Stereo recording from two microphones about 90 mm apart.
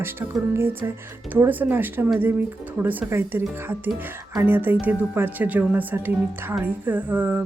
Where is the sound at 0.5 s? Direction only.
25° right (ahead or behind).